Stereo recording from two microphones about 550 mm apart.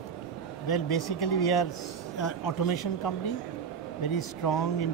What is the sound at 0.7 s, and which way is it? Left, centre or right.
Speech, left.